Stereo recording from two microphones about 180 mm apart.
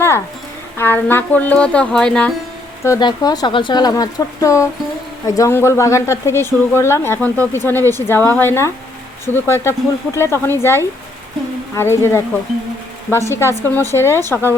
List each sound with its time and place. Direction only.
0.8 s a woman's voice: 10° left (ahead or behind)
2.8 s a woman's voice: 20° left (ahead or behind)